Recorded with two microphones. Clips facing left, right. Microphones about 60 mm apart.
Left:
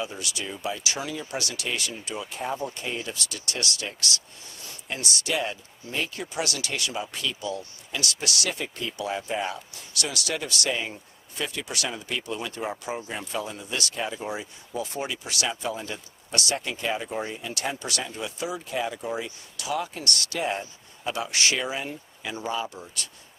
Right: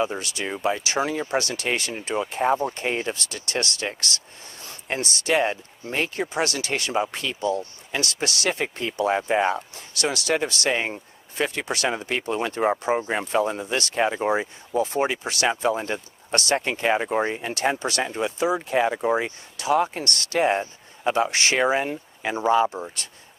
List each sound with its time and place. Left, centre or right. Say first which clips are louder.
0.0 s speech: right 7 dB; right
14.7 s speech: right 8 dB; right